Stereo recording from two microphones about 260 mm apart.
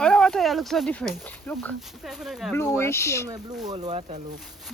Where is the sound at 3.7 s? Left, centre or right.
Right.